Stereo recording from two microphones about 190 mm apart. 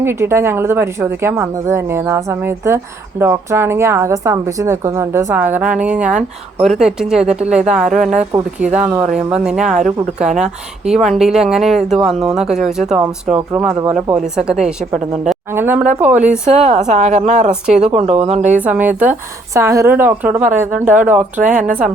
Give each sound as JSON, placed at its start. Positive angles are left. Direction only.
{"t": 0.0, "sound": "a woman's voice", "side_deg": -10}
{"t": 16.5, "sound": "a woman's voice", "side_deg": -35}
{"t": 18.5, "sound": "a woman's voice", "side_deg": -10}
{"t": 21.4, "sound": "speech", "side_deg": -45}